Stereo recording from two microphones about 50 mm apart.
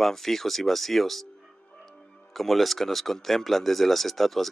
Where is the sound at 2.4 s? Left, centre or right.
Centre.